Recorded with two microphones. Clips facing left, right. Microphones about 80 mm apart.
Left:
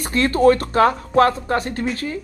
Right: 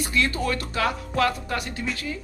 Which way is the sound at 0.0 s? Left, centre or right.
Left.